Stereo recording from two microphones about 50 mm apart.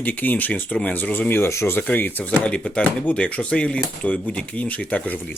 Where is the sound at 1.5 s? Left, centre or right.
Left.